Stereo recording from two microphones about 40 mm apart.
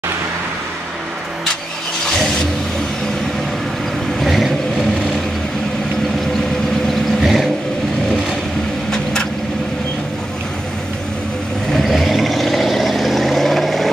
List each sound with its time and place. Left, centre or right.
2.0 s vehicle: centre
4.2 s vehicle: centre
7.2 s vehicle: centre
8.9 s vehicle: centre
11.7 s vehicle: centre